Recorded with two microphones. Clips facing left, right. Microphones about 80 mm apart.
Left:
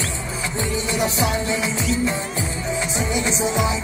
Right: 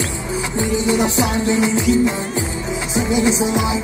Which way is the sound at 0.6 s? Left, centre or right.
Centre.